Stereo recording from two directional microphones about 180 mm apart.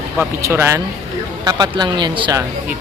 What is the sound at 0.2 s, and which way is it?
Speech, 15° right (ahead or behind).